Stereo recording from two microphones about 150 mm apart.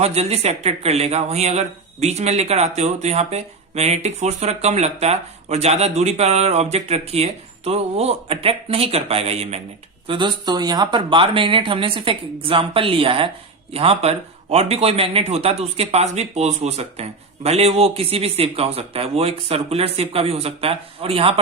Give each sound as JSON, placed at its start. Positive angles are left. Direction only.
{"t": 0.0, "sound": "speech", "side_deg": -45}
{"t": 10.1, "sound": "speech", "side_deg": -30}